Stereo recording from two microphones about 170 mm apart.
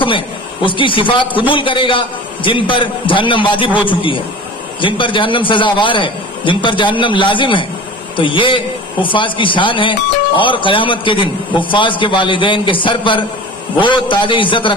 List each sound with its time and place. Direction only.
0.0 s a man's voice: 30° left (ahead or behind)